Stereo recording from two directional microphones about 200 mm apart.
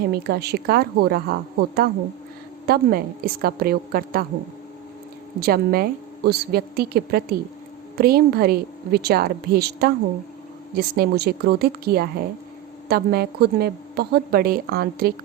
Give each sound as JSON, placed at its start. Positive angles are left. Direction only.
{"t": 0.1, "sound": "a woman's voice", "side_deg": -50}
{"t": 5.4, "sound": "a woman's voice", "side_deg": -50}